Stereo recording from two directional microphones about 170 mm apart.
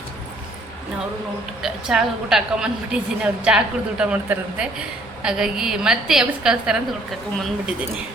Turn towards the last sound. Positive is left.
turn(degrees=0)  # may be behind; listen again after turning